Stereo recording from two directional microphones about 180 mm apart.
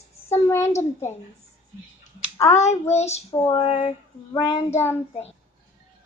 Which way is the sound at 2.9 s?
40° left (ahead or behind).